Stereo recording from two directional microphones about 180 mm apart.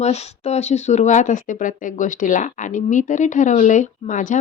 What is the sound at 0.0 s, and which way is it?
Speech, 35° left (ahead or behind).